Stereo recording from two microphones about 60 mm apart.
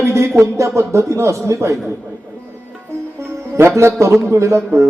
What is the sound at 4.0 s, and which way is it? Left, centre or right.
Speech, right.